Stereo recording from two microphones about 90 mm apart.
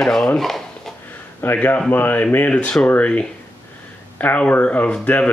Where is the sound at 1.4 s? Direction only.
20° left (ahead or behind).